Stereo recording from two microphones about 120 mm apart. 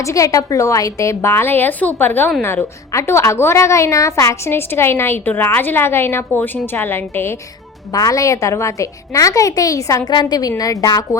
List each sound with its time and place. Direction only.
0.0 s a woman's voice: 25° left (ahead or behind)